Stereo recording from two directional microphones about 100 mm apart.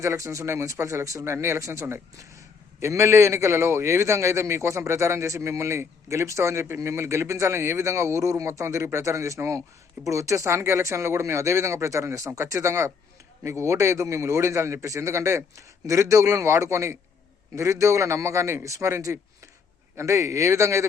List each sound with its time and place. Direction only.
0.0 s a man's voice: 30° right (ahead or behind)